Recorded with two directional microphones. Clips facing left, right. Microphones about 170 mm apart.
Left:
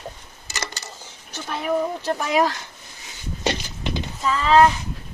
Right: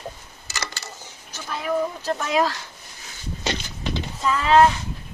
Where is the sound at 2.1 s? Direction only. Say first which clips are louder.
Left 1 dB; 15° left (ahead or behind).